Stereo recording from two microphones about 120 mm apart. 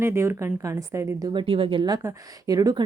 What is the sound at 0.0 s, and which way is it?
Speech, 20° right (ahead or behind).